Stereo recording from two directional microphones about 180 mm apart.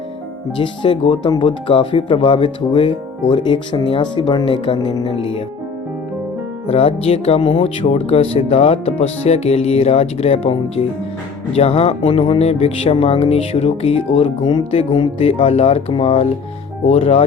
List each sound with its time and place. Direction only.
0.5 s speech: 25° left (ahead or behind)
6.7 s speech: 35° left (ahead or behind)